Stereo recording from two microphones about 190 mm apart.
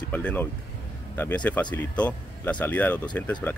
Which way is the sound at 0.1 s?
10° left (ahead or behind).